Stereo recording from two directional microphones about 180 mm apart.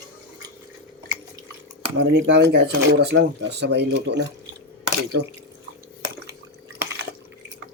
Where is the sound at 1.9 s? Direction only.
70° right (ahead or behind).